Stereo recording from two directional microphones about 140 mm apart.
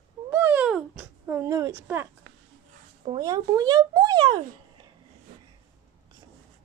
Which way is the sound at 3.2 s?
25° right (ahead or behind).